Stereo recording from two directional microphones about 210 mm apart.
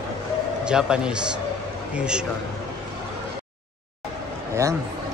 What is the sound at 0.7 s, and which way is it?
A man's voice, 5° right (ahead or behind).